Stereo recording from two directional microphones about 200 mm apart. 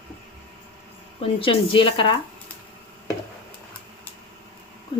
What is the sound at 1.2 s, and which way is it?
Speech, 25° left (ahead or behind).